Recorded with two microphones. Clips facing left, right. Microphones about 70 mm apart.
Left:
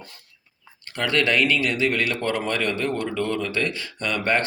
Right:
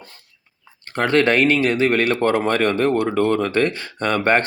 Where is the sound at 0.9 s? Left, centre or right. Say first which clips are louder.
Right 5 dB; right.